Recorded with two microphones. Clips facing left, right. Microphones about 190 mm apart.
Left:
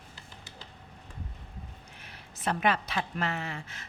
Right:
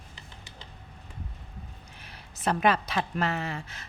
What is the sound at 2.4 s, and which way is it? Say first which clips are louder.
A woman's voice: right 3 dB; 40° right (ahead or behind).